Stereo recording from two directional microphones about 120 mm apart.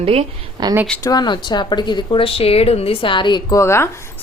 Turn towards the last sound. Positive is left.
turn(degrees=25)  # may be behind; listen again after turning